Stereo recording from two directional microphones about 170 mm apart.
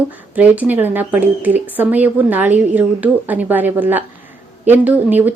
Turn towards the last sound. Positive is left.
turn(degrees=-10)  # may be behind; listen again after turning